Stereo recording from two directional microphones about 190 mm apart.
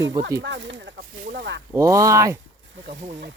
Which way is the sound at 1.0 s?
55° right (ahead or behind).